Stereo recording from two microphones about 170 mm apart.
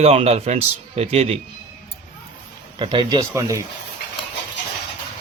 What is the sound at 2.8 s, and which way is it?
Speech, 30° right (ahead or behind).